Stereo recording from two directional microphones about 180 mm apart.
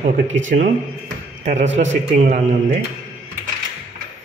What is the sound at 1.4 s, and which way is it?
Speech, 40° right (ahead or behind).